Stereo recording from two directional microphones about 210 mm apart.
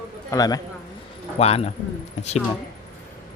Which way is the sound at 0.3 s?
20° left (ahead or behind).